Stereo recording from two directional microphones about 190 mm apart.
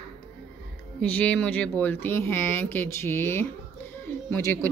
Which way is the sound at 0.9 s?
10° left (ahead or behind).